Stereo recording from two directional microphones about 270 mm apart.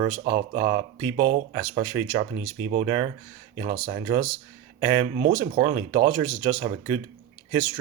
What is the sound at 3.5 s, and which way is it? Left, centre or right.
Speech, right.